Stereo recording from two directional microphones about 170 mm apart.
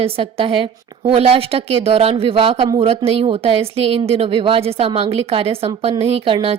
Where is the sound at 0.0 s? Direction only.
35° right (ahead or behind).